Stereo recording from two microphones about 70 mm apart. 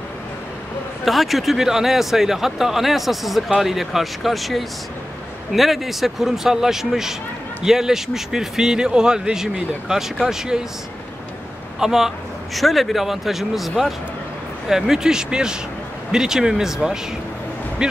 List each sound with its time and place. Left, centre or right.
1.0 s a man's voice: centre
11.8 s a man's voice: centre